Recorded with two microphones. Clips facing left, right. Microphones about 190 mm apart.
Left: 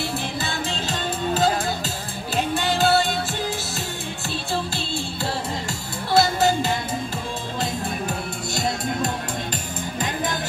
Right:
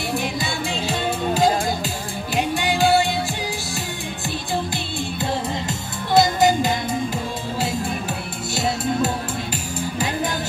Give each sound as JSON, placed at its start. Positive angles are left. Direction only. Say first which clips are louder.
{"t": 0.2, "sound": "music", "louder": "right 2 dB", "side_deg": -10}
{"t": 6.1, "sound": "music", "louder": "right 3 dB", "side_deg": -15}